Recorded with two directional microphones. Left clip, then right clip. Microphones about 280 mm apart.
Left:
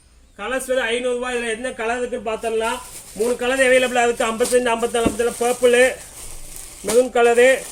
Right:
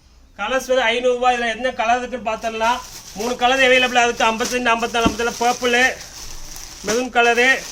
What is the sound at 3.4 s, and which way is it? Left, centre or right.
A man's voice, right.